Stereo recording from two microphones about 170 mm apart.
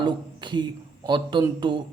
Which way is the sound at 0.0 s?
25° right (ahead or behind).